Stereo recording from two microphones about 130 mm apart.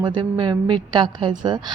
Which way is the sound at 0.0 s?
35° right (ahead or behind).